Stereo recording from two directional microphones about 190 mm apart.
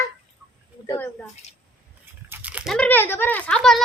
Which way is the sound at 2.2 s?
10° right (ahead or behind).